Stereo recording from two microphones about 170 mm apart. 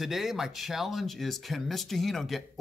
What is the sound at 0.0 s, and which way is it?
Speech, centre (ahead or behind).